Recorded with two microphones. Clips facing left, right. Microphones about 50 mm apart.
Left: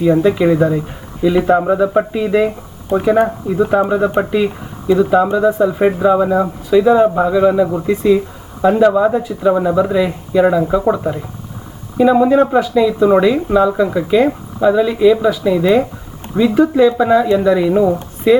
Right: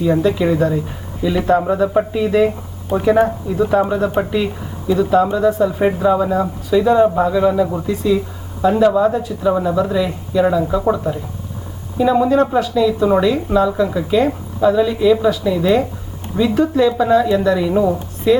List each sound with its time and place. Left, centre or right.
0.1 s speech: centre
7.9 s speech: left
11.9 s speech: centre
14.6 s speech: centre